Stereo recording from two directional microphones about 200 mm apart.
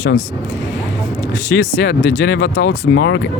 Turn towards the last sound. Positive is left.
turn(degrees=65)  # may be behind; listen again after turning